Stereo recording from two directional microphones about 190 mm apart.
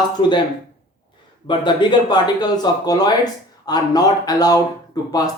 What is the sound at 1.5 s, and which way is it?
Speech, 25° left (ahead or behind).